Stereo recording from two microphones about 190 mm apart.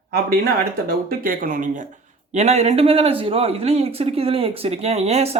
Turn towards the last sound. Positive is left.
turn(degrees=-35)  # may be behind; listen again after turning